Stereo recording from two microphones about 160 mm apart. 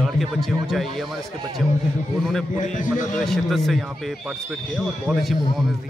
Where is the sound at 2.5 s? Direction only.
50° left (ahead or behind).